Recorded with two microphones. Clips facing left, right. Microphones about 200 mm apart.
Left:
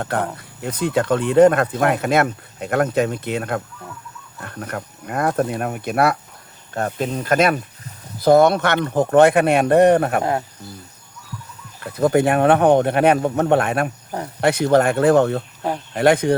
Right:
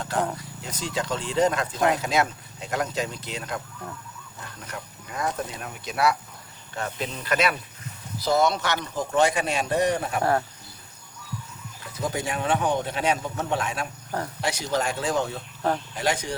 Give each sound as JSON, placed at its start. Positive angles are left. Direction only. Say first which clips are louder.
{"t": 0.0, "sound": "speech", "louder": "left 4 dB", "side_deg": 60}
{"t": 11.8, "sound": "speech", "louder": "left 13 dB", "side_deg": 60}